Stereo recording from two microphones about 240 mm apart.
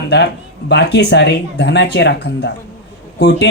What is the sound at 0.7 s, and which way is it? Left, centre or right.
Speech, left.